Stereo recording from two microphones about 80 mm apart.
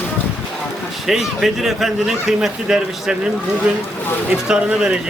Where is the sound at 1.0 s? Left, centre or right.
Centre.